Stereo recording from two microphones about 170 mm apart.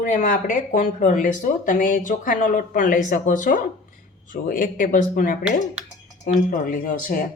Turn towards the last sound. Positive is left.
turn(degrees=50)  # may be behind; listen again after turning